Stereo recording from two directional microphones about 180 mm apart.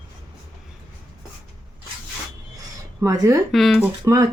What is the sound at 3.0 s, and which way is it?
Speech, 20° right (ahead or behind).